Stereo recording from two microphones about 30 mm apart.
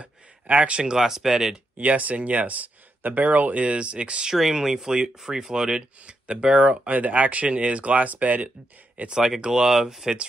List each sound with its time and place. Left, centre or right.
0.7 s speech: right
0.9 s speech: centre
1.8 s speech: right
3.6 s speech: right
4.6 s speech: right
6.0 s speech: right
6.5 s speech: right
9.0 s speech: right
9.4 s speech: right